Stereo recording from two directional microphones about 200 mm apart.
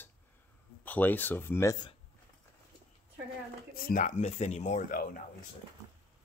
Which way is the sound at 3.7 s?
45° left (ahead or behind).